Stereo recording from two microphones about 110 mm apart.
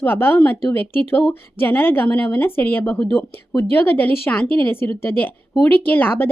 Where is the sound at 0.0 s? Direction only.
20° left (ahead or behind).